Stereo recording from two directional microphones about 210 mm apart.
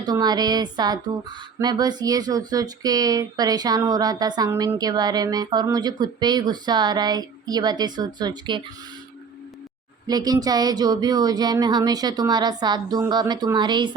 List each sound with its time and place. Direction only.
0.0 s speech: 20° right (ahead or behind)
10.1 s speech: 20° right (ahead or behind)